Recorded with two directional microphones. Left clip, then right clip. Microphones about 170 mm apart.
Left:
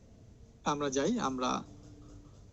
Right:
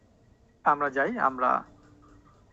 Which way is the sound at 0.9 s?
40° left (ahead or behind).